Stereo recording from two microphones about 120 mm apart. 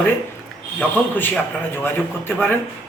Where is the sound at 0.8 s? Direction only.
15° left (ahead or behind).